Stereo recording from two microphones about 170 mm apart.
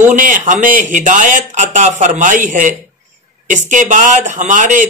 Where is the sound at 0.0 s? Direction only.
50° right (ahead or behind).